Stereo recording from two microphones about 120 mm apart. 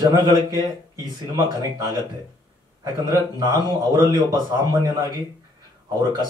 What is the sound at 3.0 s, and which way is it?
Speech, 35° right (ahead or behind).